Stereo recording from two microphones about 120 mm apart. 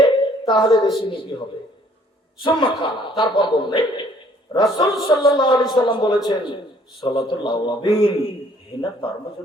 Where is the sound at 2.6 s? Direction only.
45° left (ahead or behind).